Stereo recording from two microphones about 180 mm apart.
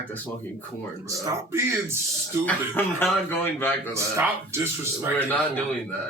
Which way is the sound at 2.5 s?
10° left (ahead or behind).